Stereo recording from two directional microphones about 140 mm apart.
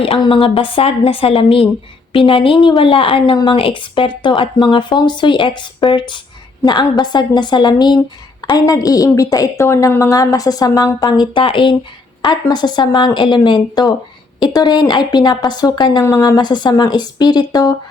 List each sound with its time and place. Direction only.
0.2 s a woman's voice: 35° left (ahead or behind)